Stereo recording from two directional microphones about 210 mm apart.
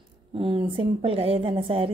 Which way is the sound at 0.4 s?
25° right (ahead or behind).